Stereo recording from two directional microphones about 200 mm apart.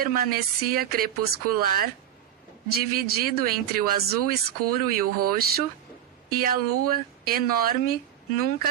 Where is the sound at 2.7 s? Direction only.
50° right (ahead or behind).